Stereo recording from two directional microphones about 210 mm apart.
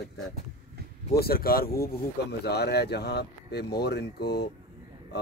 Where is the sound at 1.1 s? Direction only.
45° left (ahead or behind).